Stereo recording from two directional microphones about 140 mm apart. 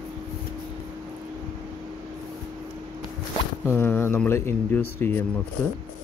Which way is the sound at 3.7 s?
15° left (ahead or behind).